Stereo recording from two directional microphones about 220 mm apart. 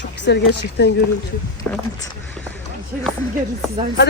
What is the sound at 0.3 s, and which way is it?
Speech, 50° left (ahead or behind).